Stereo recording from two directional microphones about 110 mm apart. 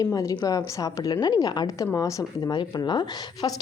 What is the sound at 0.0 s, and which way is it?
Speech, 30° left (ahead or behind).